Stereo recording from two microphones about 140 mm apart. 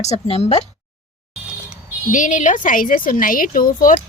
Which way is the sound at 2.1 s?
65° left (ahead or behind).